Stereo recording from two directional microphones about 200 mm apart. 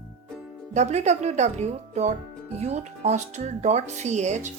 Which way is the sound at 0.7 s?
35° right (ahead or behind).